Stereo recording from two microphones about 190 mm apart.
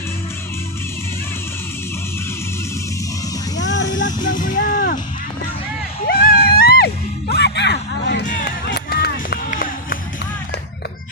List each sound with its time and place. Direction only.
3.6 s vehicle: 70° left (ahead or behind)
4.2 s music: 45° left (ahead or behind)
6.1 s music: 50° left (ahead or behind)
8.3 s a sound: 45° left (ahead or behind)
8.7 s run: 55° left (ahead or behind)